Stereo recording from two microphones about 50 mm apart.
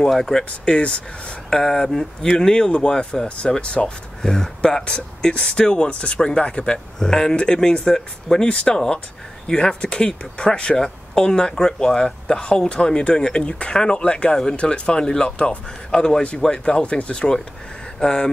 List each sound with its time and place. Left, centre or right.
0.1 s speech: centre